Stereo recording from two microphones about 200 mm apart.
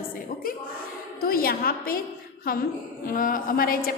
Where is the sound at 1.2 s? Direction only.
45° left (ahead or behind).